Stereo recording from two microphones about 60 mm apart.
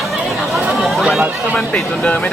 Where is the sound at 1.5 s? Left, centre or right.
Centre.